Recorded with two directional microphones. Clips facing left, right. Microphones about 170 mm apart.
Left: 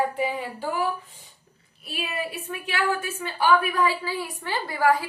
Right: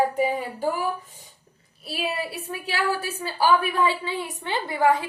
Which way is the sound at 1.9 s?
35° right (ahead or behind).